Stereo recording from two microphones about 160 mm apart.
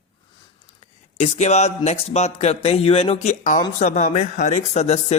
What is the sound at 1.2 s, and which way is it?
A man's voice, 45° left (ahead or behind).